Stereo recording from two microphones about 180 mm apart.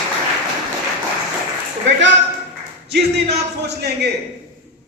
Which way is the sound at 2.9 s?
65° right (ahead or behind).